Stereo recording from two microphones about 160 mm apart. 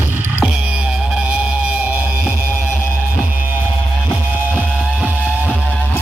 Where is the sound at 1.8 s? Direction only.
10° right (ahead or behind).